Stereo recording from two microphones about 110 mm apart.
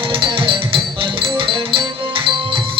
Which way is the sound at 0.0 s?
50° right (ahead or behind).